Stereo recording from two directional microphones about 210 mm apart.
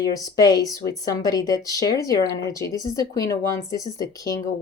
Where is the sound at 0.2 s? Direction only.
20° left (ahead or behind).